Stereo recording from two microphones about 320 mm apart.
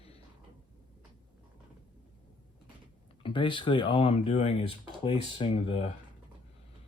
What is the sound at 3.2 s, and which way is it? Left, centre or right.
Speech, centre.